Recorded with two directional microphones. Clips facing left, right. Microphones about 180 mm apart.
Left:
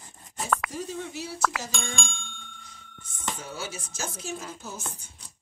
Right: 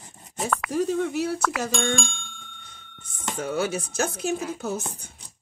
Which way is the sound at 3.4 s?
60° right (ahead or behind).